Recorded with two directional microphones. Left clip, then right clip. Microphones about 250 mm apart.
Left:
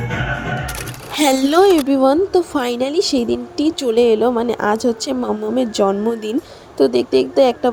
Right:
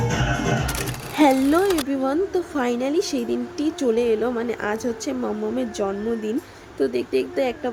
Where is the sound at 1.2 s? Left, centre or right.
Left.